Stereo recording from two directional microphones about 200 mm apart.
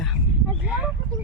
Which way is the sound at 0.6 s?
5° right (ahead or behind).